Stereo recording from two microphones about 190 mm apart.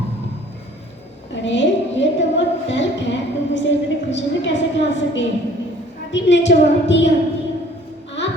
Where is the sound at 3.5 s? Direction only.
70° left (ahead or behind).